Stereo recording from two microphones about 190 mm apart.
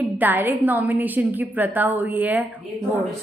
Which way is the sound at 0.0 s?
10° right (ahead or behind).